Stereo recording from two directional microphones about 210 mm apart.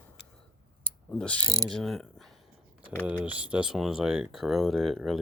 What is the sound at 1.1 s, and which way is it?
Speech, 5° left (ahead or behind).